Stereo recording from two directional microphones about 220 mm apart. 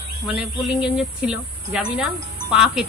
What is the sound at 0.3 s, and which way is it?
Speech, 5° right (ahead or behind).